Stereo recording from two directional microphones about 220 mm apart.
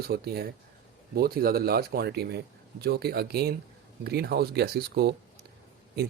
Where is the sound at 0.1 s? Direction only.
45° right (ahead or behind).